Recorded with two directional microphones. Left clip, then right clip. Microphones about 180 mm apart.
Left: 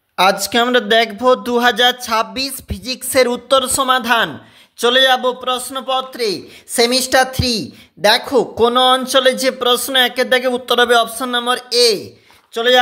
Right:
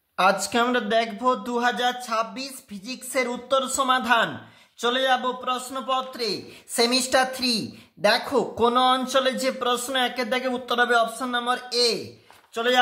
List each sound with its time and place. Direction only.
0.1 s a man's voice: 35° left (ahead or behind)